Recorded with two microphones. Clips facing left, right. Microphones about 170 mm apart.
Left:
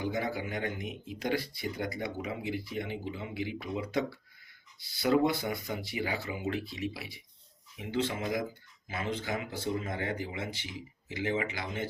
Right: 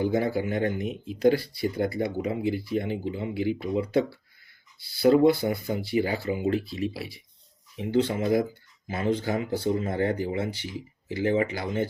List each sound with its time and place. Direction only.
0.0 s speech: 30° right (ahead or behind)
5.0 s speech: 30° right (ahead or behind)